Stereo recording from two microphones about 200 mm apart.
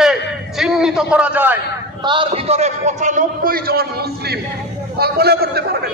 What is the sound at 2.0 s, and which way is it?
A man's voice, 25° right (ahead or behind).